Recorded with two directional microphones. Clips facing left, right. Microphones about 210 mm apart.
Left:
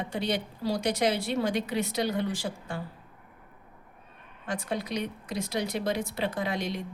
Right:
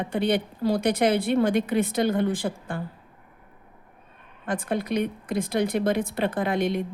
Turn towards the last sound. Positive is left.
turn(degrees=-55)  # may be behind; listen again after turning